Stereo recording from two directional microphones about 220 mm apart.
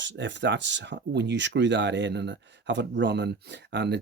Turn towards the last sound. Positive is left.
turn(degrees=-50)  # may be behind; listen again after turning